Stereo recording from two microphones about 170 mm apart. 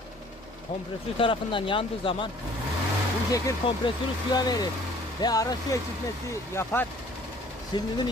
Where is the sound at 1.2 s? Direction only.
30° left (ahead or behind).